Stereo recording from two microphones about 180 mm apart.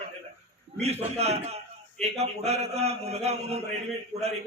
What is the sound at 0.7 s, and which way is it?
A man's voice, 35° right (ahead or behind).